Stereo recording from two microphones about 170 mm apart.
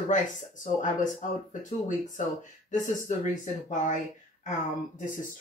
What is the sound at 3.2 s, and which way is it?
Speech, 45° left (ahead or behind).